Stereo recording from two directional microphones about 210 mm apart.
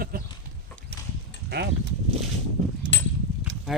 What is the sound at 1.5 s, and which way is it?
Speech, 50° right (ahead or behind).